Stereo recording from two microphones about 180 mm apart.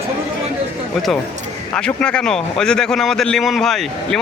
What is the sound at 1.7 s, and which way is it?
A man's voice, 5° left (ahead or behind).